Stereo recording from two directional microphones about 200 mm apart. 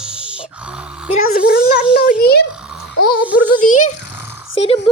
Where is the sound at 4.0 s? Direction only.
60° left (ahead or behind).